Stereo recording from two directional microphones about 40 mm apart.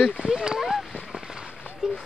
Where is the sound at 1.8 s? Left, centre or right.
Centre.